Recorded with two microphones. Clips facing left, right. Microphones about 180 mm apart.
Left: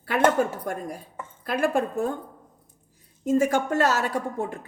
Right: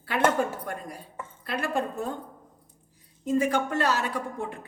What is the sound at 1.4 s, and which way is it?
Speech, 50° left (ahead or behind).